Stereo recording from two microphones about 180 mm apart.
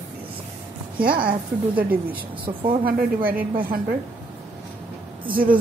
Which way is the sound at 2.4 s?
30° right (ahead or behind).